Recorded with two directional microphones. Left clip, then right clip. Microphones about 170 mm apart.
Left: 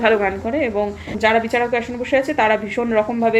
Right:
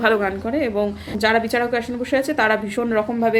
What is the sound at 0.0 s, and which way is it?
A woman's voice, 10° right (ahead or behind).